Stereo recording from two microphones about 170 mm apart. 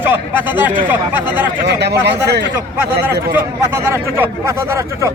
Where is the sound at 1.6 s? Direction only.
80° right.